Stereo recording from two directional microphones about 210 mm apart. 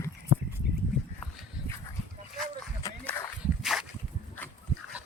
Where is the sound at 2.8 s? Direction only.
15° left (ahead or behind).